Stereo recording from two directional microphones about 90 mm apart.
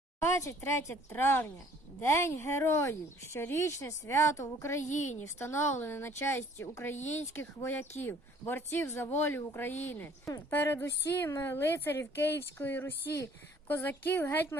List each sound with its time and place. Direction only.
0.2 s a woman's voice: 35° left (ahead or behind)